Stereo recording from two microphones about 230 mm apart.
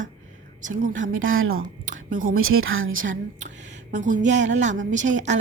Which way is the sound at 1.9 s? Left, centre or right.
Right.